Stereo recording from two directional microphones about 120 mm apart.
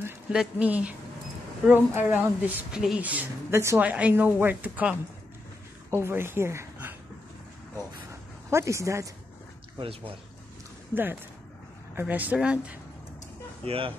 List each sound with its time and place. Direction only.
0.3 s a woman's voice: 10° right (ahead or behind)
8.1 s a sound: 25° right (ahead or behind)
9.8 s speech: 50° right (ahead or behind)
11.9 s a woman's voice: 15° right (ahead or behind)
13.7 s speech: 50° right (ahead or behind)